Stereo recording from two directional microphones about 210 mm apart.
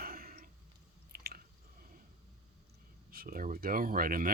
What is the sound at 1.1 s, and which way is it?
Chewing, 45° right (ahead or behind).